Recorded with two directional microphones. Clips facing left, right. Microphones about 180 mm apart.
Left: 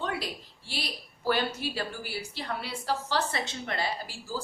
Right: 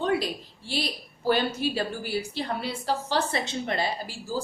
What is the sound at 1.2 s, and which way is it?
A woman's voice, 25° right (ahead or behind).